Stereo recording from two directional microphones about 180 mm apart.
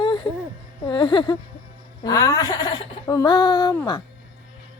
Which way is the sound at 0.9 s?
25° left (ahead or behind).